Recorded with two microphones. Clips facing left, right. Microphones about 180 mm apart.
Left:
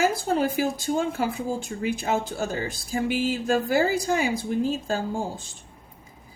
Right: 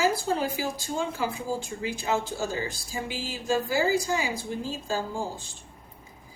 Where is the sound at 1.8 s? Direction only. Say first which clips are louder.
Left 4 dB; 55° left (ahead or behind).